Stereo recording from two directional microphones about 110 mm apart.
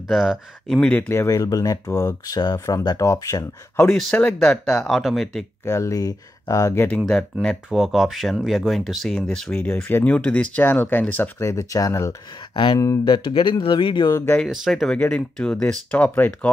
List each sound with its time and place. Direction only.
0.1 s speech: centre (ahead or behind)
0.7 s speech: 10° left (ahead or behind)
1.2 s speech: 30° left (ahead or behind)
3.8 s speech: 5° left (ahead or behind)
5.7 s speech: 25° left (ahead or behind)
7.7 s speech: centre (ahead or behind); by 13.0 s 30° left (ahead or behind)
13.0 s speech: 45° left (ahead or behind)
14.0 s speech: 25° left (ahead or behind)
14.5 s speech: centre (ahead or behind)